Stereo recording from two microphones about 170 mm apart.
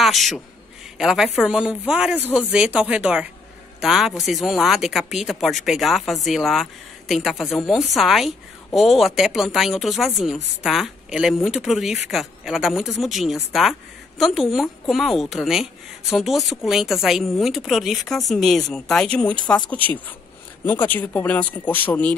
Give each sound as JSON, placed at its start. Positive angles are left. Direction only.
{"t": 0.0, "sound": "a man's voice", "side_deg": 0}